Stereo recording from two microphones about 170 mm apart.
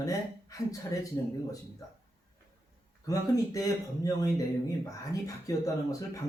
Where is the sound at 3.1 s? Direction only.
20° left (ahead or behind).